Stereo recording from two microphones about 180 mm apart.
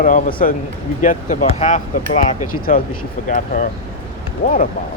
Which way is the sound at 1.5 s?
35° left (ahead or behind).